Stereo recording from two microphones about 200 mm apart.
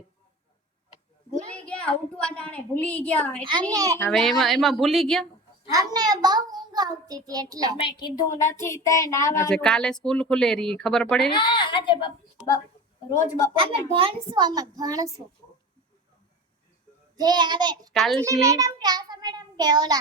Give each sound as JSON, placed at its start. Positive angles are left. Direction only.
{"t": 1.6, "sound": "a woman's voice", "side_deg": 5}
{"t": 3.4, "sound": "a child's voice", "side_deg": -20}
{"t": 3.9, "sound": "speech", "side_deg": 5}
{"t": 5.7, "sound": "a child's voice", "side_deg": -20}
{"t": 7.8, "sound": "speech", "side_deg": 20}
{"t": 9.5, "sound": "speech", "side_deg": 5}
{"t": 11.3, "sound": "a child's voice", "side_deg": 25}
{"t": 13.6, "sound": "a child's voice", "side_deg": -30}
{"t": 17.2, "sound": "a child's voice", "side_deg": -20}
{"t": 17.9, "sound": "speech", "side_deg": 0}
{"t": 18.3, "sound": "a child's voice", "side_deg": -20}